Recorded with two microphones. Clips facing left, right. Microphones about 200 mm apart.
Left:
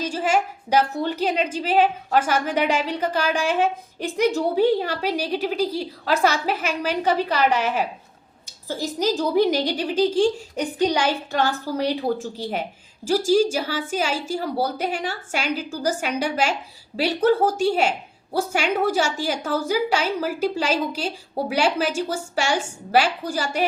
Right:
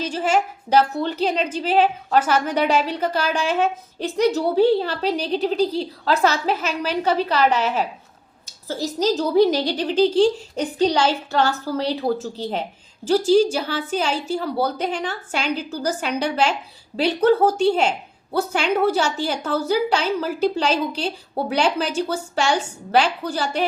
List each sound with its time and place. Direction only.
0.3 s a woman's voice: 10° left (ahead or behind)